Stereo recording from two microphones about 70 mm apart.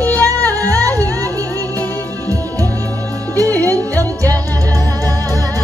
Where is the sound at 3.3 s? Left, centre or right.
Left.